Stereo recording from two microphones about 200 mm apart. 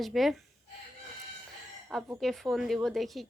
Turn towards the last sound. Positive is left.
turn(degrees=0)  # may be behind; listen again after turning